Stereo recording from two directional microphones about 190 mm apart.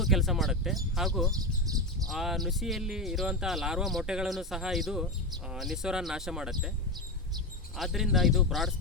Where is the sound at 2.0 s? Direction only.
Centre (ahead or behind).